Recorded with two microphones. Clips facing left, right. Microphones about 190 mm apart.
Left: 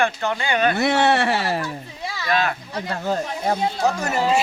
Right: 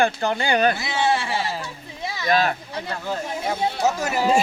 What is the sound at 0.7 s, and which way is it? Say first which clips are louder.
Speech: left 5 dB; 65° left (ahead or behind).